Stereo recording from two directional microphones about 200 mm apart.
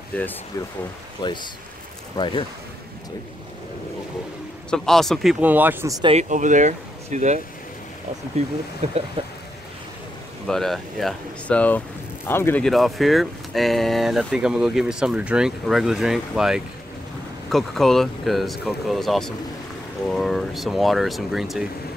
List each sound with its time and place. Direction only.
0.1 s speech: 10° left (ahead or behind)
1.2 s speech: 20° left (ahead or behind)
4.6 s speech: centre (ahead or behind); by 6.1 s 15° right (ahead or behind)
6.1 s speech: 40° right (ahead or behind)
8.8 s speech: 35° right (ahead or behind)
10.4 s speech: centre (ahead or behind)